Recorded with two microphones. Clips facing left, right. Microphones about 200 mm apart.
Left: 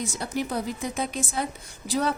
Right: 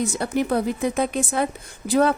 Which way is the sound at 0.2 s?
60° right (ahead or behind).